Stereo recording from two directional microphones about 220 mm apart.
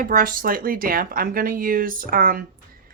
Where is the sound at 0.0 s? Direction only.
40° right (ahead or behind).